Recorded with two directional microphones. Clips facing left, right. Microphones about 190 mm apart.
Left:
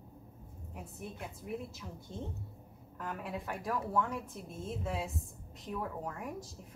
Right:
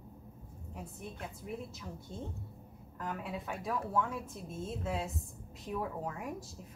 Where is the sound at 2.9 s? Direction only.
Centre (ahead or behind).